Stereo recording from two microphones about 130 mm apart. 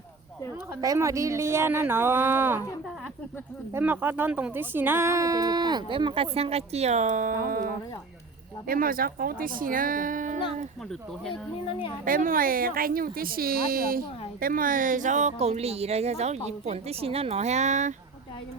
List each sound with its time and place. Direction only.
0.8 s speech: 25° right (ahead or behind)
3.8 s speech: 15° right (ahead or behind); by 10.7 s 75° right (ahead or behind)
12.0 s speech: 90° right; by 17.9 s 65° right (ahead or behind)